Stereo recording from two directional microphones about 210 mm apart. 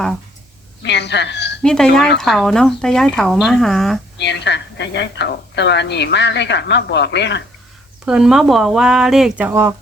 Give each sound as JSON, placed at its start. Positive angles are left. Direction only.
{"t": 0.8, "sound": "a woman's voice", "side_deg": 55}
{"t": 1.6, "sound": "speech", "side_deg": 5}
{"t": 4.2, "sound": "a woman's voice", "side_deg": 55}
{"t": 8.0, "sound": "speech", "side_deg": 0}